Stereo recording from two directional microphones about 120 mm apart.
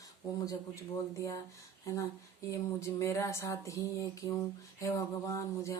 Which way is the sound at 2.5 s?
25° left (ahead or behind).